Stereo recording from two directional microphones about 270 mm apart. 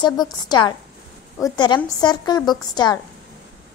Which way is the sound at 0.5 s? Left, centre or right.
Centre.